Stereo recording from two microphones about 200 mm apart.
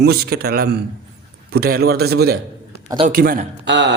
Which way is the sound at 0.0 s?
50° right (ahead or behind).